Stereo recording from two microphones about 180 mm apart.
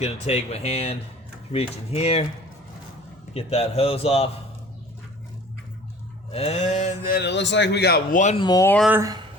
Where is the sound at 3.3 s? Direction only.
35° left (ahead or behind).